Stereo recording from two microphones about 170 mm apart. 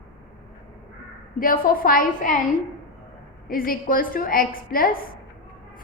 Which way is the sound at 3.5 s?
55° left (ahead or behind).